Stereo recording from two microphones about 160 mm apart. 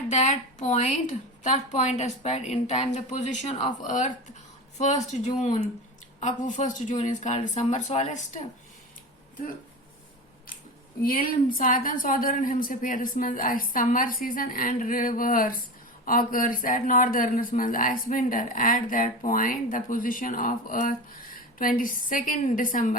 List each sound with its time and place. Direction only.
0.1 s speech: 45° left (ahead or behind)
11.0 s speech: 65° left (ahead or behind)